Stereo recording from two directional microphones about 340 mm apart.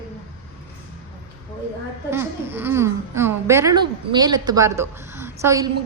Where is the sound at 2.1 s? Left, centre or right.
Centre.